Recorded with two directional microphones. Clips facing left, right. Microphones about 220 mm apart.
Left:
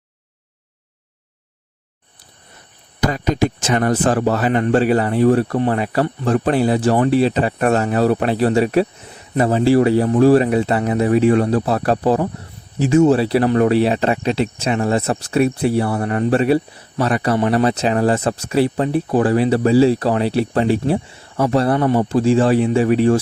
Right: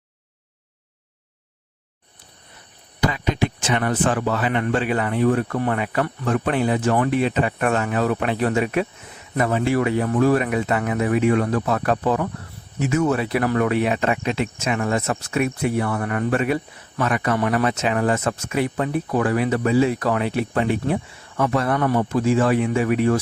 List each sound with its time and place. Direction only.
3.0 s speech: 45° left (ahead or behind)